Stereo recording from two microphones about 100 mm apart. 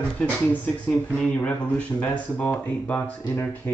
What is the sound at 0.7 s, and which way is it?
Speech, 5° left (ahead or behind).